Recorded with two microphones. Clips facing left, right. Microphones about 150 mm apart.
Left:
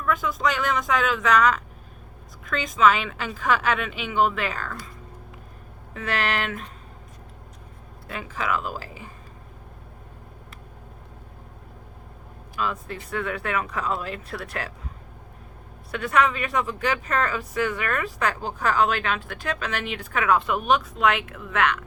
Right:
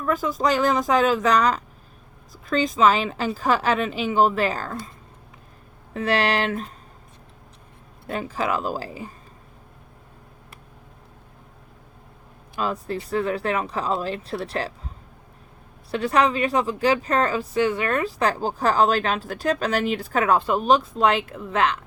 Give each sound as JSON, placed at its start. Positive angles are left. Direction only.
{"t": 0.0, "sound": "speech", "side_deg": -35}
{"t": 5.9, "sound": "speech", "side_deg": -35}
{"t": 8.0, "sound": "speech", "side_deg": -35}
{"t": 12.5, "sound": "speech", "side_deg": -35}
{"t": 15.9, "sound": "speech", "side_deg": -30}